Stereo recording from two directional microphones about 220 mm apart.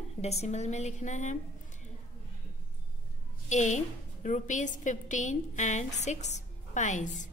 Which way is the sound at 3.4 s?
35° left (ahead or behind).